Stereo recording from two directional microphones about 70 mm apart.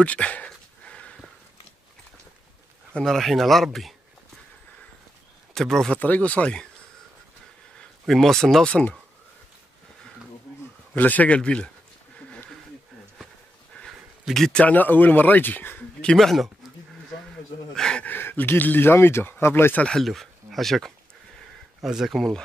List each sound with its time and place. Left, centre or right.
0.0 s a sound: centre
2.9 s speech: centre
5.5 s speech: centre
5.9 s speech: left
8.1 s speech: centre
11.0 s a man's voice: left
13.7 s a sound: left
14.3 s speech: centre
14.6 s speech: left
16.0 s a man's voice: centre
17.7 s a sound: centre
18.0 s speech: left
20.0 s speech: centre